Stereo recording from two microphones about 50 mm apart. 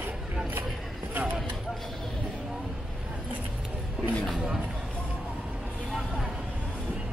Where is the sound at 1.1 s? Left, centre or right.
Right.